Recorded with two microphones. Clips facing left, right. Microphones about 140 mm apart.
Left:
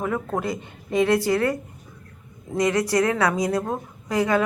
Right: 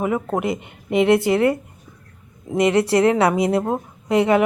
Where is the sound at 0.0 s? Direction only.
20° right (ahead or behind).